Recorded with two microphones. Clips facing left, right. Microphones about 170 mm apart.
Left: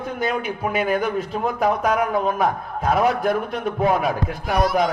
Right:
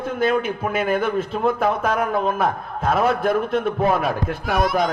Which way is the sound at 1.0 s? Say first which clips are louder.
Right 1 dB; 15° left (ahead or behind).